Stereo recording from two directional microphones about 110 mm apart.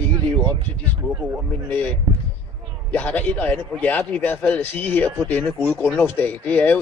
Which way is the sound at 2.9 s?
15° left (ahead or behind).